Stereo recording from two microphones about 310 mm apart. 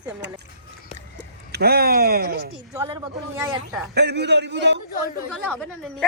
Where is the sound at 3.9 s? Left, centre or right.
Right.